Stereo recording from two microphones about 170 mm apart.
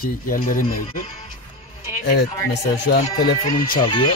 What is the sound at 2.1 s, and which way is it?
Speech, 85° left.